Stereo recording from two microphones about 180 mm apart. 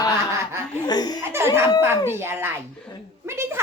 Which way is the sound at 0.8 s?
20° left (ahead or behind).